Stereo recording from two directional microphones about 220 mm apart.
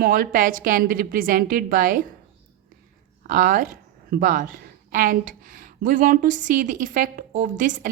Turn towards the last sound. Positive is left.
turn(degrees=-35)  # may be behind; listen again after turning